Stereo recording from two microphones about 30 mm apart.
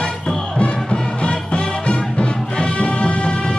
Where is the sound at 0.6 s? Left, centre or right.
Left.